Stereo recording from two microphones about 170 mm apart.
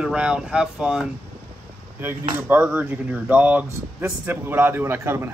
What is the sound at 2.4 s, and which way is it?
Speech, 10° right (ahead or behind).